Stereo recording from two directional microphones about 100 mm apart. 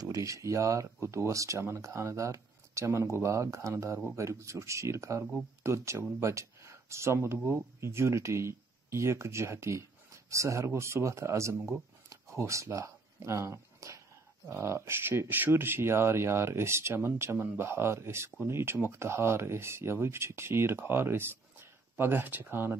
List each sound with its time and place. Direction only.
0.0 s speech: 35° right (ahead or behind)
12.1 s a sound: 30° right (ahead or behind)
14.5 s speech: 25° right (ahead or behind)